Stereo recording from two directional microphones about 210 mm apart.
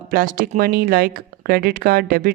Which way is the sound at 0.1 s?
40° right (ahead or behind).